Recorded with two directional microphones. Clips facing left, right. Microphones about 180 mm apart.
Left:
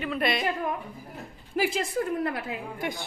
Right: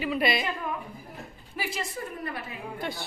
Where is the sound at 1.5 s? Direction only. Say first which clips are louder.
Left 8 dB; 80° left.